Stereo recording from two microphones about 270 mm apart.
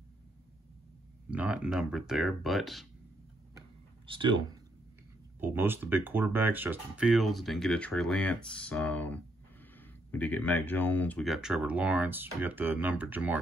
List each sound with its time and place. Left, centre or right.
1.3 s speech: centre
4.0 s speech: centre
5.4 s speech: centre